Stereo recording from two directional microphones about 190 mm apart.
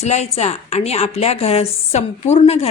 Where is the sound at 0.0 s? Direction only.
35° left (ahead or behind).